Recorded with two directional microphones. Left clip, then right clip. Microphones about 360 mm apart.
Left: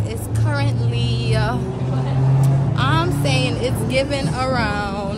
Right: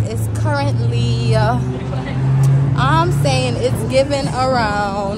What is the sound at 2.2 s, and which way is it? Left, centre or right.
Vehicle, left.